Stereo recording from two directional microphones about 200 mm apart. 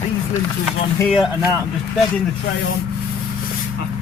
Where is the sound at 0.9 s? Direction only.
5° left (ahead or behind).